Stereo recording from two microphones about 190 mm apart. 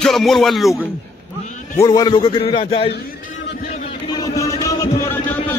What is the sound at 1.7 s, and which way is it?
A man's voice, 20° left (ahead or behind).